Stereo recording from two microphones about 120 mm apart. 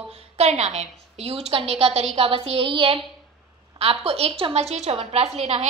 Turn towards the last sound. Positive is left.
turn(degrees=-60)  # may be behind; listen again after turning